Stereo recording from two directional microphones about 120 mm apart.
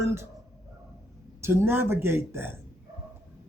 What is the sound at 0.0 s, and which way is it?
Speech, 25° right (ahead or behind).